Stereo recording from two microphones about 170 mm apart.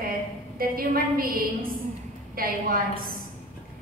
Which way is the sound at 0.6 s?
60° right (ahead or behind).